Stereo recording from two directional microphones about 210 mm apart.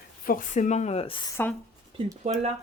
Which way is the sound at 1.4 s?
10° left (ahead or behind).